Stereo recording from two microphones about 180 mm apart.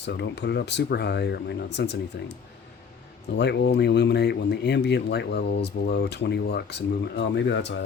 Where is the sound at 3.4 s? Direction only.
70° left (ahead or behind).